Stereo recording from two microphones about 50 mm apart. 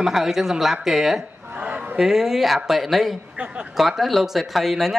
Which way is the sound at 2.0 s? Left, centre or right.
Centre.